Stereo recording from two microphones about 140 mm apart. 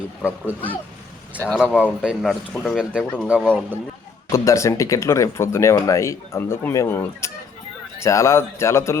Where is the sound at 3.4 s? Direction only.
5° left (ahead or behind).